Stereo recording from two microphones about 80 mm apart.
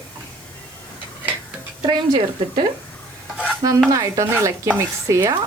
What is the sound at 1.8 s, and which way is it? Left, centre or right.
Speech, right.